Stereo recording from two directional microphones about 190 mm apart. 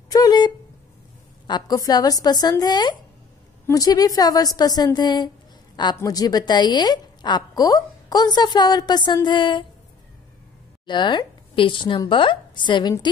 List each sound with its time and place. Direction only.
0.1 s a sound: 20° left (ahead or behind)
1.5 s a woman's voice: 20° left (ahead or behind)
10.9 s a woman's voice: 25° left (ahead or behind)